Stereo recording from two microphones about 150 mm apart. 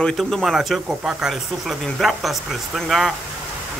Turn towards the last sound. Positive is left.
turn(degrees=0)  # may be behind; listen again after turning